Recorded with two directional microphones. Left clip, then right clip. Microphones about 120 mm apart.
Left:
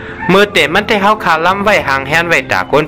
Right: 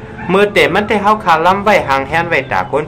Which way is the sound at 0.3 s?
55° left (ahead or behind).